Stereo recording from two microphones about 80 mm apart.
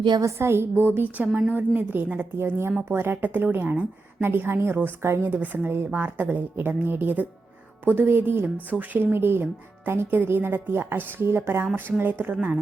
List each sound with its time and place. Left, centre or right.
0.2 s speech: right; by 12.5 s centre